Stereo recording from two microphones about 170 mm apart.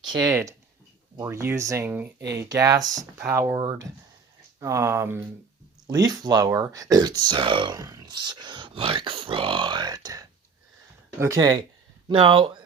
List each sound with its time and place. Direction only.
0.0 s speech: 25° right (ahead or behind)
4.6 s speech: 15° right (ahead or behind)